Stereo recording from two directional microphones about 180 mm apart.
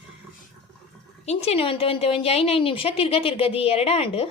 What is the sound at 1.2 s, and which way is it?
A woman's voice, 35° left (ahead or behind).